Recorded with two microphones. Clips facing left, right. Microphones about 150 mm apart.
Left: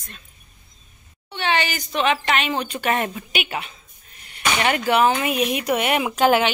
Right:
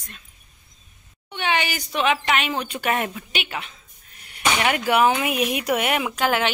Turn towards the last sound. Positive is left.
turn(degrees=25)  # may be behind; listen again after turning